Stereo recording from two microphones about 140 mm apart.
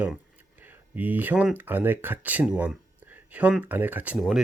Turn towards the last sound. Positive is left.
turn(degrees=0)  # may be behind; listen again after turning